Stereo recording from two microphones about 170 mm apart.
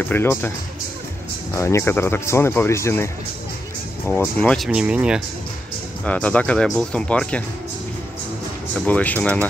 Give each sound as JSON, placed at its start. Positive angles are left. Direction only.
{"t": 0.0, "sound": "speech", "side_deg": 15}
{"t": 1.5, "sound": "speech", "side_deg": 15}
{"t": 4.1, "sound": "speech", "side_deg": 10}
{"t": 4.6, "sound": "speech", "side_deg": -5}
{"t": 6.0, "sound": "speech", "side_deg": 10}
{"t": 8.8, "sound": "speech", "side_deg": 10}